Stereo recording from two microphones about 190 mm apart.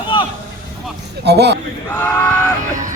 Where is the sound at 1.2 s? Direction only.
60° right (ahead or behind).